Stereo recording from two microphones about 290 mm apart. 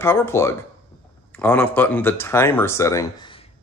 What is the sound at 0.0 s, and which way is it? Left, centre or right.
Speech, centre.